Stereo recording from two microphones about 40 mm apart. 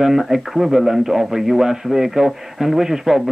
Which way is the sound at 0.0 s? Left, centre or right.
Centre.